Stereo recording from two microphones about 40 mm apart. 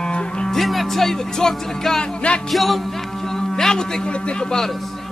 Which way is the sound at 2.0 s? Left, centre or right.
Left.